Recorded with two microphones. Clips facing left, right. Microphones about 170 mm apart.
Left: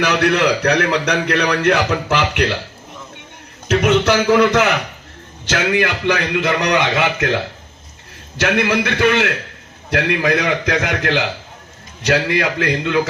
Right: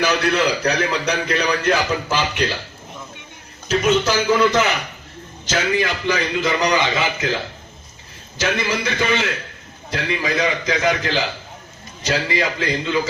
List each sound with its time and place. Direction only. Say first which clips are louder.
0.0 s a man's voice: left 3 dB; 70° left (ahead or behind)
3.7 s a man's voice: left 3 dB; 65° left (ahead or behind)